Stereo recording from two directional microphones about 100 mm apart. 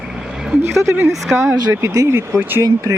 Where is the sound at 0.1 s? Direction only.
5° right (ahead or behind).